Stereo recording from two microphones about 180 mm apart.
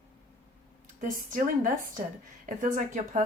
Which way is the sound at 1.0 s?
50° right (ahead or behind).